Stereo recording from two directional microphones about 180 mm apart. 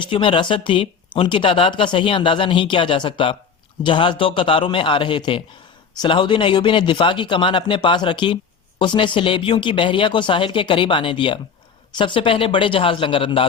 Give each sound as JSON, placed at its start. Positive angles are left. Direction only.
{"t": 0.1, "sound": "speech", "side_deg": 30}